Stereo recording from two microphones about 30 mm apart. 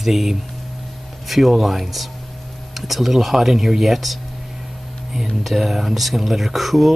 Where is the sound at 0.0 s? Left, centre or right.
Centre.